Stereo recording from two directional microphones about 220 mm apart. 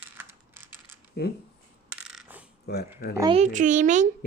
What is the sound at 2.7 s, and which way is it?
Speech, 45° left (ahead or behind).